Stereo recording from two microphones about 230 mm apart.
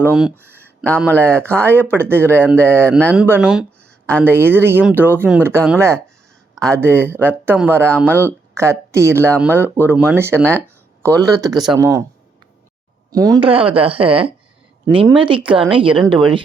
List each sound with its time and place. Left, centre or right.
0.0 s speech: centre
2.4 s speech: centre
2.6 s speech: centre
3.0 s speech: centre
3.2 s a sound: centre
4.2 s speech: centre
13.1 s speech: centre